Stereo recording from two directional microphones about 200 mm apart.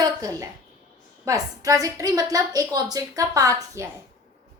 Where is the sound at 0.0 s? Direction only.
20° right (ahead or behind).